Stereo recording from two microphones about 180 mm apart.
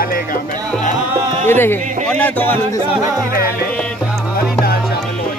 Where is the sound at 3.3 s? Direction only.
55° left (ahead or behind).